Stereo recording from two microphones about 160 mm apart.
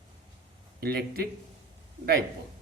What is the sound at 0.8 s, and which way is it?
Speech, 75° right (ahead or behind).